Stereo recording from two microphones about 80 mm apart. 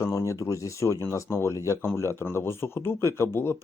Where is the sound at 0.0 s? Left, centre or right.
Left.